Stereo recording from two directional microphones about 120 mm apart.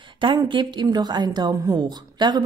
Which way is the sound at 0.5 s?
40° right (ahead or behind).